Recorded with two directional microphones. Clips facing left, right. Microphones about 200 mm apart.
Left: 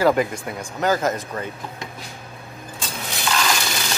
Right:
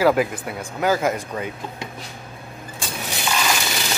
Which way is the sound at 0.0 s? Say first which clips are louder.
Right 1 dB; 5° right (ahead or behind).